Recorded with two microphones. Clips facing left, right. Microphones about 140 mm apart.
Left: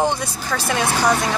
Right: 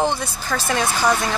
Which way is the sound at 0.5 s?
Centre (ahead or behind).